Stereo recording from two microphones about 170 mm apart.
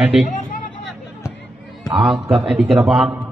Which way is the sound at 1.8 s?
Centre (ahead or behind).